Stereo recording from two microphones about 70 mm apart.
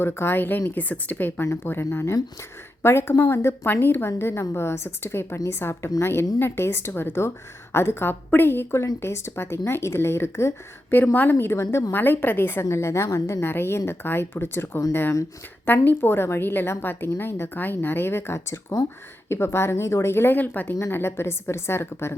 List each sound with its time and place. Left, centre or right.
0.0 s a woman's voice: left
1.6 s a woman's voice: left
10.9 s a woman's voice: left
12.6 s a woman's voice: left
18.3 s speech: left
19.3 s a woman's voice: left
20.9 s a woman's voice: left